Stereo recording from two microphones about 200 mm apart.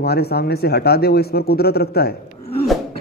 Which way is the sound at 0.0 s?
55° left (ahead or behind).